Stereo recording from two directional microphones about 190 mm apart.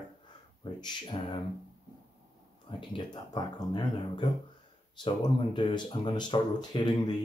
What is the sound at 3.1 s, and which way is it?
Speech, 20° left (ahead or behind).